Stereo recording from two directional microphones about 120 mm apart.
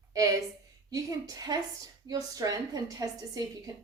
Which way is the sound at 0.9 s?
30° right (ahead or behind).